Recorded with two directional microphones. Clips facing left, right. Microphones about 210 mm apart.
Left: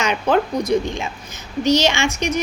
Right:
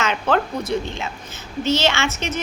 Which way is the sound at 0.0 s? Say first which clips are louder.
Left 2 dB; 15° left (ahead or behind).